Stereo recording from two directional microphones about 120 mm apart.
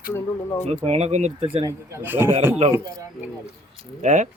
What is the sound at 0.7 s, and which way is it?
Speech, 65° right (ahead or behind).